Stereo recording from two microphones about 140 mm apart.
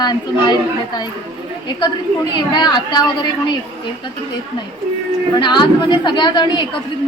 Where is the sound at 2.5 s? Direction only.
35° left (ahead or behind).